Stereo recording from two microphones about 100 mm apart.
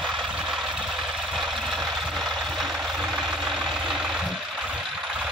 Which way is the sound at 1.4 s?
Centre (ahead or behind).